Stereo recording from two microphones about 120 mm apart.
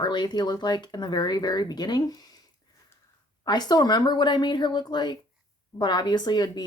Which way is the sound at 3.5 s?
35° left (ahead or behind).